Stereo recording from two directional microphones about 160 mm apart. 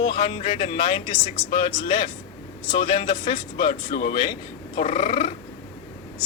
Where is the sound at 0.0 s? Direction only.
35° left (ahead or behind).